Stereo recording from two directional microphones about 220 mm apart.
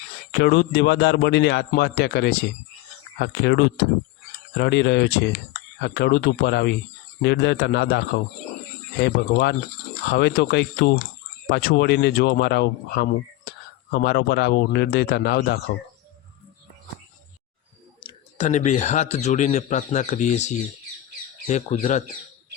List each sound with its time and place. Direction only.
0.3 s speech: 50° left (ahead or behind)
18.0 s speech: 30° left (ahead or behind)